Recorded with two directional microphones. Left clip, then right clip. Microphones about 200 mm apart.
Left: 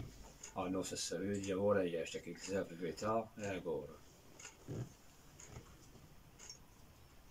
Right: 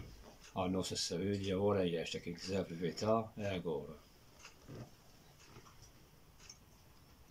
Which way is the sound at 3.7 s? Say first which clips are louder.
Even; 20° right (ahead or behind).